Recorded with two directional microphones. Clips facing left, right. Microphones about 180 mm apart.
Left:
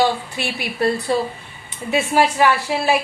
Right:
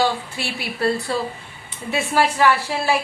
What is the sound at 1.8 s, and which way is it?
A woman's voice, 15° left (ahead or behind).